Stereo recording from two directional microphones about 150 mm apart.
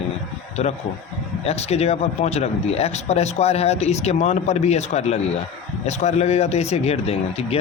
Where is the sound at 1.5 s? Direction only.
45° left (ahead or behind).